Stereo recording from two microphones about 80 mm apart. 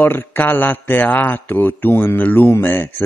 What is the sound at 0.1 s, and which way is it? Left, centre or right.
A man's voice, left.